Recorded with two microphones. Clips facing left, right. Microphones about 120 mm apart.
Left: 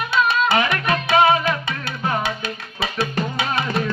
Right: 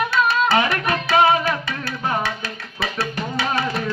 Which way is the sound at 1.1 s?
20° left (ahead or behind).